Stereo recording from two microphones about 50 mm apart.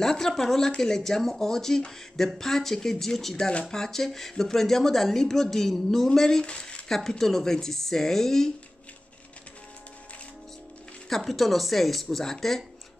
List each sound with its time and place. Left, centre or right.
0.0 s speech: centre
6.9 s speech: centre
11.1 s speech: centre